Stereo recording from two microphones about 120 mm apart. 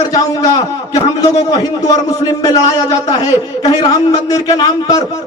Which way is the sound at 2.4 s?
30° left (ahead or behind).